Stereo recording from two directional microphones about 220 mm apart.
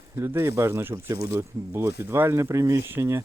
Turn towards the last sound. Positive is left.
turn(degrees=-10)  # may be behind; listen again after turning